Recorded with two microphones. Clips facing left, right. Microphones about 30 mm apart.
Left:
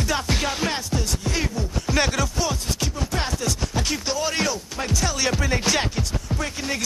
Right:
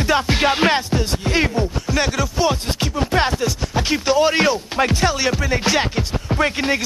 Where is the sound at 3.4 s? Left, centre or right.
Centre.